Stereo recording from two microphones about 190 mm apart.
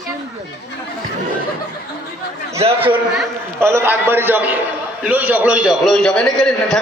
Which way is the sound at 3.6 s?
15° right (ahead or behind).